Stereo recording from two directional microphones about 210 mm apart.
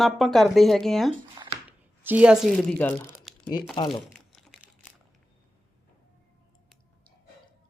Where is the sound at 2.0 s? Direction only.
5° right (ahead or behind).